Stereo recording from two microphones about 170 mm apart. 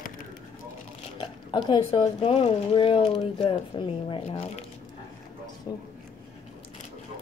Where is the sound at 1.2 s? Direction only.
25° left (ahead or behind).